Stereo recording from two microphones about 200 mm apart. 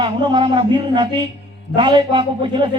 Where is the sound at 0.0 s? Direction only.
25° right (ahead or behind).